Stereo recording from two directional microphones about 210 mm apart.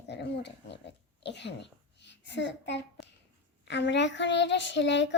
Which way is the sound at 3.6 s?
55° left (ahead or behind).